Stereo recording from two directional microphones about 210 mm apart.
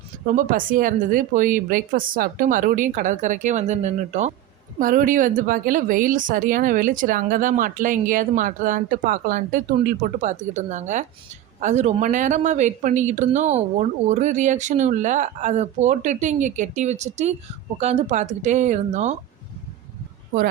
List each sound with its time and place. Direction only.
0.3 s speech: 40° right (ahead or behind)